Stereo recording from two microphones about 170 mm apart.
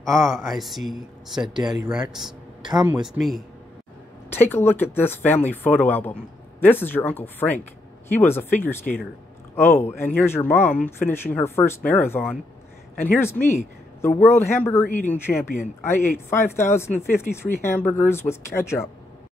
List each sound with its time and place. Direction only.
0.0 s speech: centre (ahead or behind)
1.6 s speech: 25° right (ahead or behind)
1.9 s speech: 5° right (ahead or behind)
4.3 s speech: 10° left (ahead or behind)